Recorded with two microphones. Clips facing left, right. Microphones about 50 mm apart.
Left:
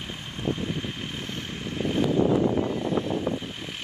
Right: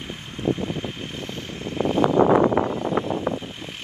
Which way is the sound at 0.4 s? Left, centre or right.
Right.